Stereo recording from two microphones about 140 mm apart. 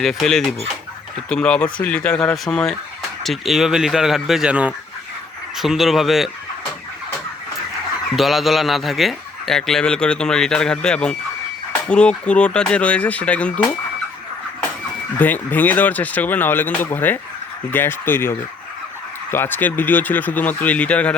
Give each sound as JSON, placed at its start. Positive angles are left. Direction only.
{"t": 0.0, "sound": "speech", "side_deg": 0}
{"t": 8.1, "sound": "speech", "side_deg": 0}
{"t": 15.2, "sound": "speech", "side_deg": 10}